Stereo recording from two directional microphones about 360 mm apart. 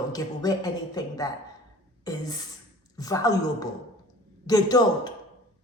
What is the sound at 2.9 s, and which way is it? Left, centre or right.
Speech, centre.